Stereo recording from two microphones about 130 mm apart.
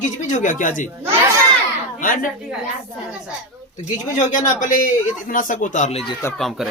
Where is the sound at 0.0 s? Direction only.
70° left (ahead or behind).